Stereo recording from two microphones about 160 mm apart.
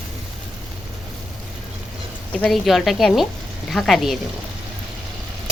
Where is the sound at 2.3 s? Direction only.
5° left (ahead or behind).